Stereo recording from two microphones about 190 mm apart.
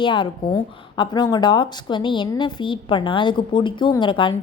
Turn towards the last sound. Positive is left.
turn(degrees=25)  # may be behind; listen again after turning